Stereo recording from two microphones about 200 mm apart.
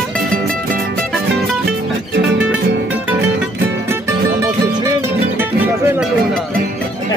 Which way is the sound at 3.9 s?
15° right (ahead or behind).